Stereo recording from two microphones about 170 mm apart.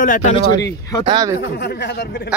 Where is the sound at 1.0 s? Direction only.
30° right (ahead or behind).